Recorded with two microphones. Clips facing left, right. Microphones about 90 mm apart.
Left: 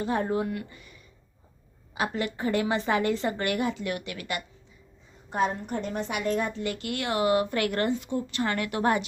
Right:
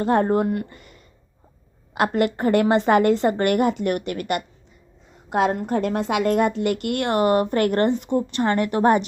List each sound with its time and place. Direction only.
0.0 s a woman's voice: 60° right (ahead or behind)
2.0 s a woman's voice: 60° right (ahead or behind)
5.3 s a woman's voice: 70° right (ahead or behind); by 8.4 s 45° right (ahead or behind)
8.4 s a woman's voice: 35° right (ahead or behind)